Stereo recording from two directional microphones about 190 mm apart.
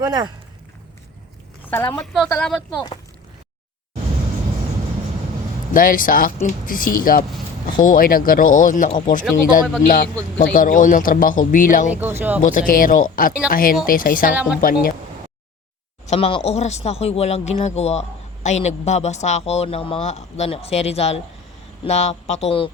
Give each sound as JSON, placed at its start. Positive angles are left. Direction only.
{"t": 0.0, "sound": "speech", "side_deg": -20}
{"t": 1.9, "sound": "a woman's voice", "side_deg": 5}
{"t": 5.7, "sound": "speech", "side_deg": 45}
{"t": 16.0, "sound": "speech", "side_deg": 30}